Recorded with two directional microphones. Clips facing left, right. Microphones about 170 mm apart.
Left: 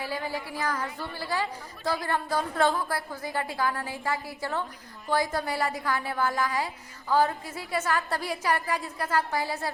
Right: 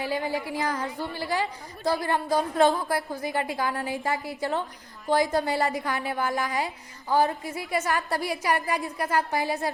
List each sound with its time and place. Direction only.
0.0 s a woman's voice: 20° right (ahead or behind)